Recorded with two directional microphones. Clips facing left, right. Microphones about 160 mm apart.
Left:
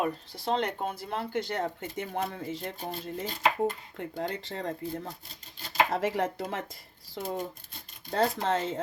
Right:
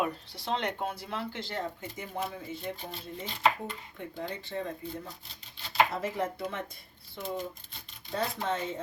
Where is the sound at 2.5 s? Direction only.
90° left.